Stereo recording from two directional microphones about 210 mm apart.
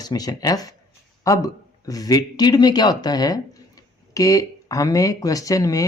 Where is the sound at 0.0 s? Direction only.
20° left (ahead or behind).